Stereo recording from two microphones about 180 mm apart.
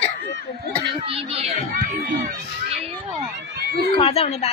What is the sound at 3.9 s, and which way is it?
Speech, 35° left (ahead or behind).